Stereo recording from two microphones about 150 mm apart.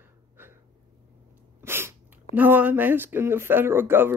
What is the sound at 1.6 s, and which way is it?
Sneeze, 15° right (ahead or behind).